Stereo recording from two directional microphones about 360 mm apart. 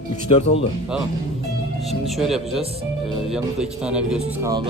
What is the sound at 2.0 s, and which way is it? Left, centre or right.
A man's voice, centre.